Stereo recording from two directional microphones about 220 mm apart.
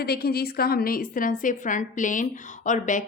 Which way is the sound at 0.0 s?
45° left (ahead or behind).